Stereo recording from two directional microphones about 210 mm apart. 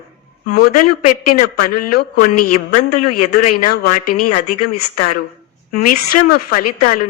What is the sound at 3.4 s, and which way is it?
Speech, 40° left (ahead or behind).